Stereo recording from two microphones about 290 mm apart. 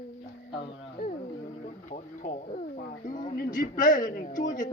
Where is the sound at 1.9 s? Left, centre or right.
Left.